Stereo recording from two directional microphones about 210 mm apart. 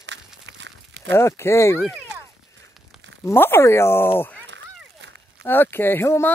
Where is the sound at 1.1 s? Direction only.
10° left (ahead or behind).